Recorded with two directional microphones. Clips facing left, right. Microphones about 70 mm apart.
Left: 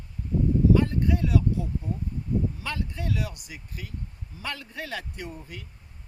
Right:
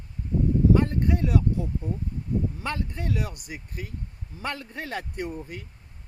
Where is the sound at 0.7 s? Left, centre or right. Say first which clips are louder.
Even; right.